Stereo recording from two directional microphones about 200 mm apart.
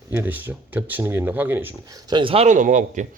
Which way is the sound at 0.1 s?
10° right (ahead or behind).